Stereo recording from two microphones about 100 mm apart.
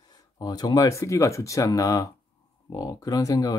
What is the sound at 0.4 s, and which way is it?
Speech, 40° left (ahead or behind).